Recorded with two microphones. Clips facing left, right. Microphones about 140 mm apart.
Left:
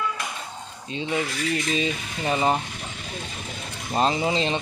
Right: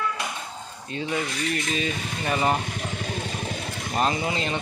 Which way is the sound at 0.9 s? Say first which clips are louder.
Left 1 dB; 20° left (ahead or behind).